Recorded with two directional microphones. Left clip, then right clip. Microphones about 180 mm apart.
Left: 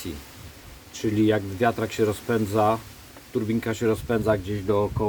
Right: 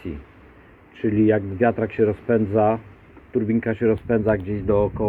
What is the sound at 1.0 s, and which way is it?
Speech, 20° left (ahead or behind).